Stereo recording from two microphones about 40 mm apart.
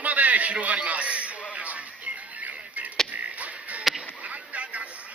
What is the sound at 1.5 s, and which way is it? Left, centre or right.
Music, right.